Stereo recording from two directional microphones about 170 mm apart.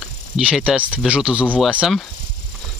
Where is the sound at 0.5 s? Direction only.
5° right (ahead or behind).